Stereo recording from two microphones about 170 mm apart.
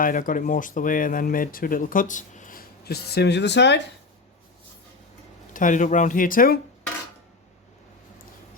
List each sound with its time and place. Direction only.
0.0 s speech: 55° left (ahead or behind); by 3.8 s 90° left
5.5 s speech: 50° left (ahead or behind)